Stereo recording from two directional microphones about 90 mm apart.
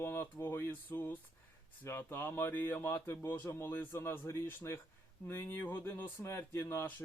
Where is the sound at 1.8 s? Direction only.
25° left (ahead or behind).